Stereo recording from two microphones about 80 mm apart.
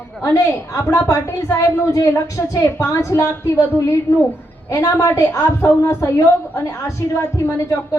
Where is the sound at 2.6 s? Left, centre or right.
Left.